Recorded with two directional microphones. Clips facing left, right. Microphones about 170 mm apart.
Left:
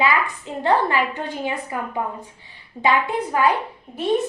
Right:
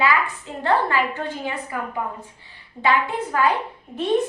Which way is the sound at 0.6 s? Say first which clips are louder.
Left 1 dB; 15° left (ahead or behind).